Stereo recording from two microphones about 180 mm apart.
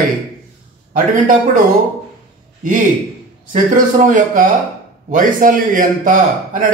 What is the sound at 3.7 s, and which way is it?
A man's voice, 45° right (ahead or behind).